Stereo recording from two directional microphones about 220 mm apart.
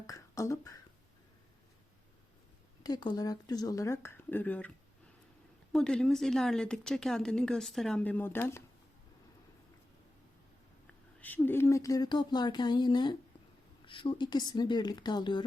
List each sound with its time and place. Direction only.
0.1 s beatboxing: 15° left (ahead or behind)
2.8 s speech: 20° left (ahead or behind)
5.7 s speech: 5° left (ahead or behind)
11.2 s speech: 10° left (ahead or behind)